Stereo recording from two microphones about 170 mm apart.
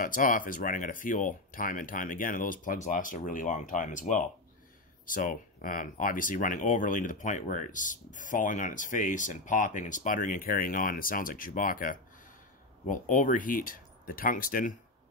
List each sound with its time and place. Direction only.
0.0 s speech: 50° left (ahead or behind)